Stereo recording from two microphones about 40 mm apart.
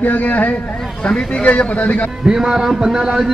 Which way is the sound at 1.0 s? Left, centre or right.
Left.